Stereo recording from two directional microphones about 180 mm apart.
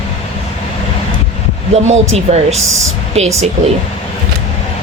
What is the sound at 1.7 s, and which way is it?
Speech, 40° right (ahead or behind).